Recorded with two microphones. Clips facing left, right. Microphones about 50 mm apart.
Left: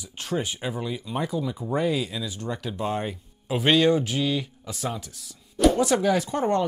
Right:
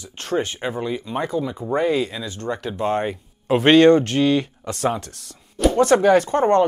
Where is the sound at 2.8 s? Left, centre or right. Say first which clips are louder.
Right 7 dB; right.